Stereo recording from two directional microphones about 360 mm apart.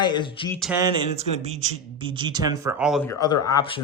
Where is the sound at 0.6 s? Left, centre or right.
Centre.